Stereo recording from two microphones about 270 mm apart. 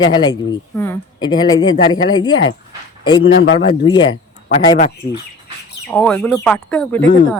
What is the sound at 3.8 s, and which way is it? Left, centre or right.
Speech, centre.